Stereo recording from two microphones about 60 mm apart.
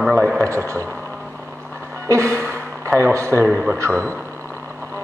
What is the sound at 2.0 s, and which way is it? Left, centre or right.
Speech, right.